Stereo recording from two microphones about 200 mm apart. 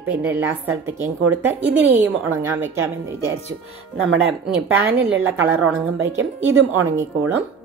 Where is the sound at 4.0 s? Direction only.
75° right (ahead or behind).